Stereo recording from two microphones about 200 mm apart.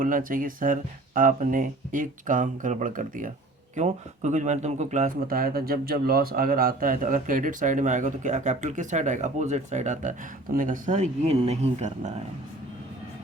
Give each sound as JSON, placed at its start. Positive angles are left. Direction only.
{"t": 0.0, "sound": "speech", "side_deg": -45}